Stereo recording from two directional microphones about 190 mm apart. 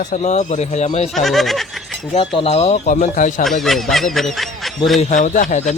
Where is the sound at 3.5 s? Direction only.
Centre (ahead or behind).